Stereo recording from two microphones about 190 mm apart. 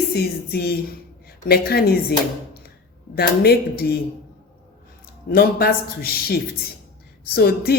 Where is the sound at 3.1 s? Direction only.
55° left (ahead or behind).